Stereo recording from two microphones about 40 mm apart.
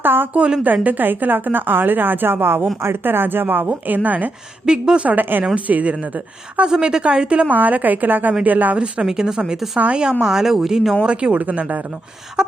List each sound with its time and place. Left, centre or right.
0.0 s a sound: right
0.6 s a woman's voice: right
4.6 s a woman's voice: centre
5.0 s a woman's voice: right
5.5 s a woman's voice: right
6.7 s a woman's voice: centre
7.5 s a woman's voice: right
9.0 s a woman's voice: centre
10.2 s speech: centre
11.0 s a woman's voice: right
11.3 s a woman's voice: right
12.4 s a woman's voice: centre